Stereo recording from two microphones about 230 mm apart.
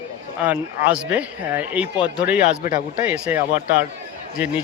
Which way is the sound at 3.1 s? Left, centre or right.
Centre.